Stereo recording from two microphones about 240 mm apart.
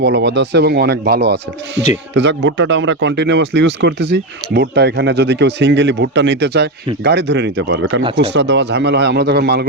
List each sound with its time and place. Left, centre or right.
0.0 s speech: right